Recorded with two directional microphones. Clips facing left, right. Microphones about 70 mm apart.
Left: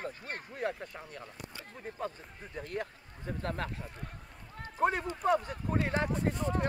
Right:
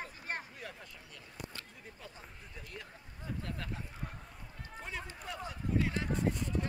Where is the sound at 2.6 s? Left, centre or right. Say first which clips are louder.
Left 12 dB; left.